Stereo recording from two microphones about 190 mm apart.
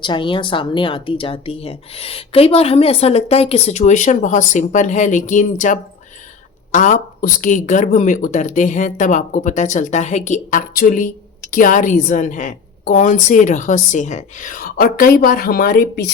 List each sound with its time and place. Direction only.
0.0 s a woman's voice: 25° left (ahead or behind); by 16.1 s 55° left (ahead or behind)